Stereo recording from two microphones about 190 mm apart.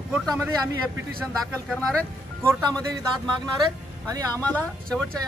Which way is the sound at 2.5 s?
5° left (ahead or behind).